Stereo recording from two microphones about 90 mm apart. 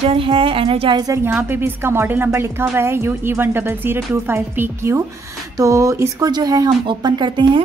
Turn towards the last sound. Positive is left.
turn(degrees=-60)  # may be behind; listen again after turning